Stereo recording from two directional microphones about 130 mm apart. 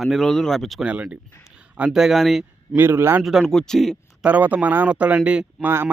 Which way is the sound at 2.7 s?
15° right (ahead or behind).